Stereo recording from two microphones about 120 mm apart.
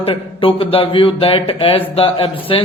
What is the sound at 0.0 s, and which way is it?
A man's voice, 50° left (ahead or behind).